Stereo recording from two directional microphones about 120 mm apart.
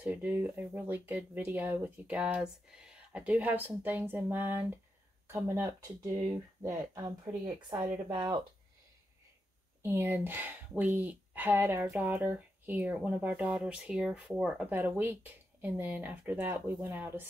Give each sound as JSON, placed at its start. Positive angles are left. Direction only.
{"t": 0.0, "sound": "speech", "side_deg": -15}
{"t": 8.1, "sound": "speech", "side_deg": -40}
{"t": 9.8, "sound": "speech", "side_deg": -20}